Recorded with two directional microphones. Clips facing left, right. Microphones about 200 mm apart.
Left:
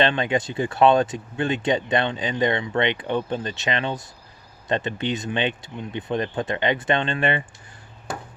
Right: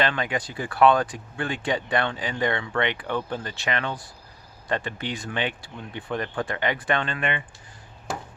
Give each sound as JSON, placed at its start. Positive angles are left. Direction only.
{"t": 0.0, "sound": "speech", "side_deg": 25}